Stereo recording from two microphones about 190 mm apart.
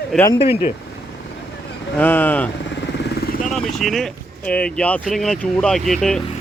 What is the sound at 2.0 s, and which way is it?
A man's voice, 10° left (ahead or behind).